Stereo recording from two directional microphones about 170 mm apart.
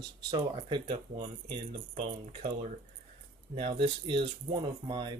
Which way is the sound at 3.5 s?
30° right (ahead or behind).